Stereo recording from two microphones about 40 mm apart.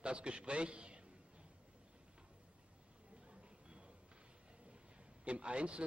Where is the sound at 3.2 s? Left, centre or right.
Right.